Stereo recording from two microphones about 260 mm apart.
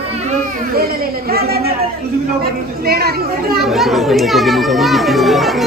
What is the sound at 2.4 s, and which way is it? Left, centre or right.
Speech, right.